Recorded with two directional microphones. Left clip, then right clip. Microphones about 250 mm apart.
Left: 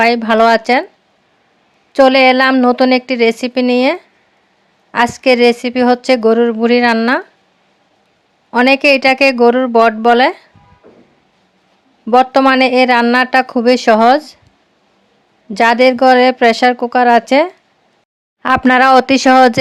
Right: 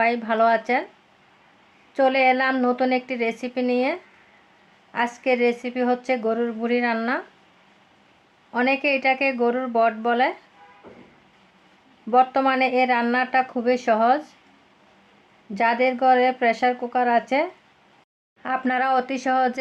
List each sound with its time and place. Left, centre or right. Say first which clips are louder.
0.0 s speech: left 10 dB; left
1.9 s speech: left 11 dB; left
8.4 s speech: left 12 dB; left
12.1 s speech: left 9 dB; left
15.5 s speech: left 11 dB; left